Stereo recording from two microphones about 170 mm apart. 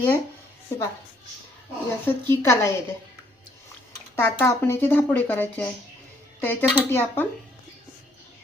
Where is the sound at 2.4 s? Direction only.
15° left (ahead or behind).